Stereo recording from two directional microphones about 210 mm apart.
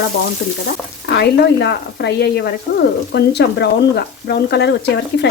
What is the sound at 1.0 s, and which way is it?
Speech, 55° left (ahead or behind).